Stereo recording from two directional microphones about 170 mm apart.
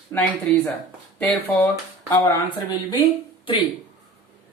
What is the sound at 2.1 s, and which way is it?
Speech, 20° left (ahead or behind).